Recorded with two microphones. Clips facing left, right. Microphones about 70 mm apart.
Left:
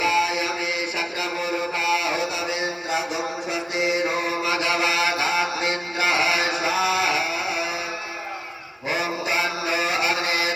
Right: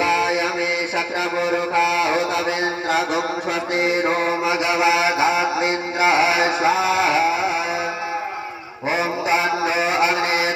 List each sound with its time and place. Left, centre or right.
0.0 s mantra: right
3.8 s mantra: right
4.4 s mantra: right
8.9 s mantra: right